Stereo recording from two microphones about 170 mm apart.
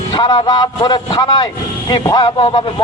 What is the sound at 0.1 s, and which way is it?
A man's voice, 30° left (ahead or behind).